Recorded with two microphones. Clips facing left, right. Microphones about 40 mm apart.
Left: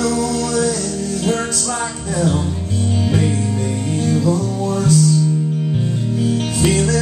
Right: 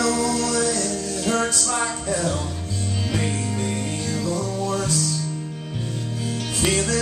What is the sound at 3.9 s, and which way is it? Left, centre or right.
Music, centre.